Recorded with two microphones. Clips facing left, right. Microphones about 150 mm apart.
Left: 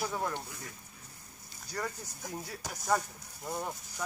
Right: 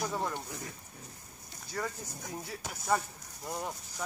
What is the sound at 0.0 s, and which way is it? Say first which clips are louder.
Speech: even; centre (ahead or behind).